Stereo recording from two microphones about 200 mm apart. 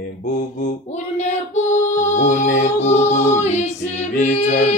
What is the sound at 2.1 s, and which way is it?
Mantra, 35° left (ahead or behind).